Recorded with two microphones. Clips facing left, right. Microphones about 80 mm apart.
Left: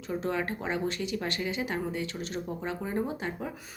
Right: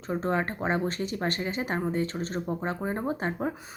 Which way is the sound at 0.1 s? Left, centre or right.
Right.